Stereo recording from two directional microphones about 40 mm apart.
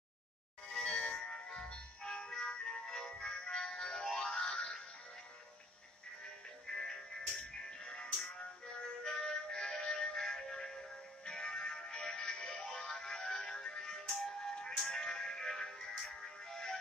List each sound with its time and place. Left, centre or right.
0.7 s music: centre
6.7 s music: centre